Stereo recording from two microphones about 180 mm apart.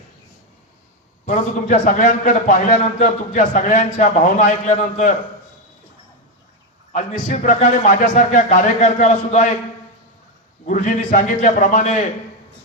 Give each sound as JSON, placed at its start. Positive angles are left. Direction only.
{"t": 1.2, "sound": "a man's voice", "side_deg": 40}
{"t": 6.9, "sound": "a man's voice", "side_deg": 40}
{"t": 10.7, "sound": "a man's voice", "side_deg": 45}